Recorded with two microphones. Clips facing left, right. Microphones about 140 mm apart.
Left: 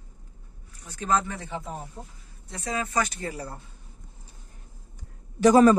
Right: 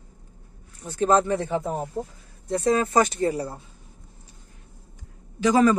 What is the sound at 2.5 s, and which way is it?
Speech, 40° right (ahead or behind).